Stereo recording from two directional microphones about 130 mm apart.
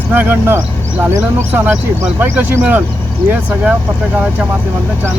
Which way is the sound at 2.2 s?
15° right (ahead or behind).